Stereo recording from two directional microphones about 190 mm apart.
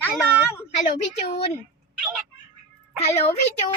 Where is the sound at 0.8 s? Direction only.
35° left (ahead or behind).